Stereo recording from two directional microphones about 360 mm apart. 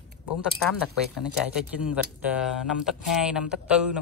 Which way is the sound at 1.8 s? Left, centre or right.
Centre.